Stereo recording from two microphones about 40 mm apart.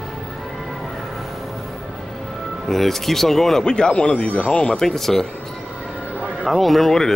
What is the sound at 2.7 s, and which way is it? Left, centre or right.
Speech, centre.